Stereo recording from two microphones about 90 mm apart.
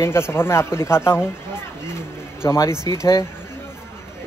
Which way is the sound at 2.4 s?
30° left (ahead or behind).